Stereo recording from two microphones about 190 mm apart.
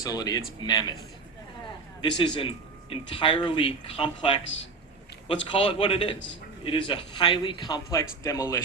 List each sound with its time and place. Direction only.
0.0 s speech: 20° left (ahead or behind)
2.0 s speech: 25° left (ahead or behind)